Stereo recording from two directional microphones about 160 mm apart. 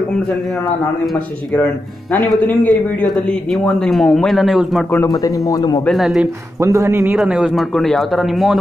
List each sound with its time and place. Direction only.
2.2 s a man's voice: 5° left (ahead or behind)
4.9 s speech: 20° left (ahead or behind)
5.9 s speech: centre (ahead or behind)
6.6 s a man's voice: 20° right (ahead or behind)
7.2 s speech: 5° right (ahead or behind)